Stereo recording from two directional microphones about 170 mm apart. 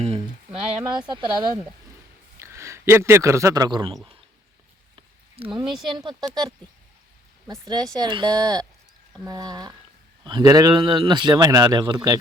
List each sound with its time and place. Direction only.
0.0 s speech: 35° right (ahead or behind)
2.4 s a man's voice: 15° right (ahead or behind)
5.6 s speech: centre (ahead or behind)
6.1 s speech: 25° right (ahead or behind)
7.9 s speech: 25° right (ahead or behind)